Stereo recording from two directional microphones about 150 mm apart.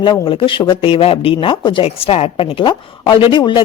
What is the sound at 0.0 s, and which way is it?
A woman's voice, 35° left (ahead or behind).